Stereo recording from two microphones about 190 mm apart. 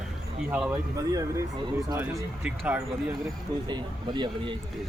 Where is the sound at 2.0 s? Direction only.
10° right (ahead or behind).